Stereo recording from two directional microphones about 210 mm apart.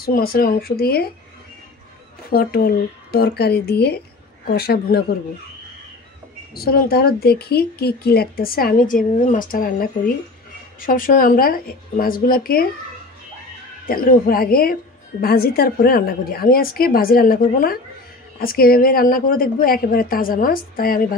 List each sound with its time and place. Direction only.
0.0 s a woman's voice: 45° left (ahead or behind)
2.3 s a woman's voice: 45° left (ahead or behind)
6.5 s a woman's voice: 45° left (ahead or behind)
13.8 s a woman's voice: 45° left (ahead or behind)